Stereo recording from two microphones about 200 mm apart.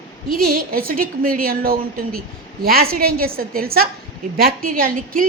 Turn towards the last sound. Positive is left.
turn(degrees=-45)  # may be behind; listen again after turning